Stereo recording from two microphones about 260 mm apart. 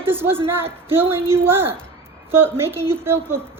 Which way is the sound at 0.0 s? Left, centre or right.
Centre.